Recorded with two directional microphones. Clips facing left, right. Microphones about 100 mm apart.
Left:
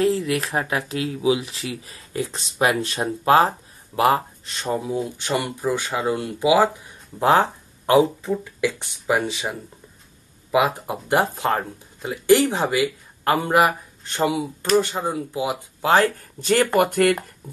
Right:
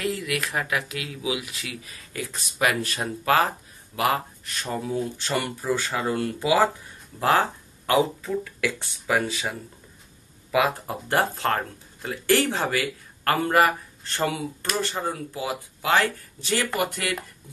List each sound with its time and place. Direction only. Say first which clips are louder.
0.0 s speech: left 7 dB; 30° left (ahead or behind); by 15.5 s 15° left (ahead or behind)
15.8 s speech: left 5 dB; 35° left (ahead or behind)